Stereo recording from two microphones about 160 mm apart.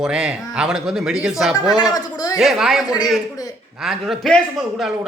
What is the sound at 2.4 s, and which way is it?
Speech, centre (ahead or behind).